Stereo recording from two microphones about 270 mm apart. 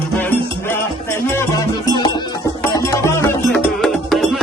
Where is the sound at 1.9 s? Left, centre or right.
Centre.